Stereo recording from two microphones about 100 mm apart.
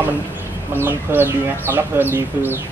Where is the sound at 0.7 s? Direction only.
20° right (ahead or behind).